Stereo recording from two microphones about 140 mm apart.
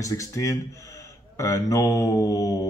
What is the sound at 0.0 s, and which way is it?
A man's voice, 25° left (ahead or behind).